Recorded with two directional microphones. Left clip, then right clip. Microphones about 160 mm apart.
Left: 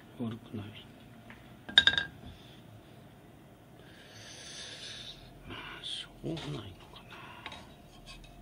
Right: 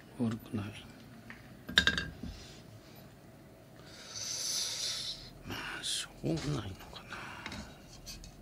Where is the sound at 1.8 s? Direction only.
20° left (ahead or behind).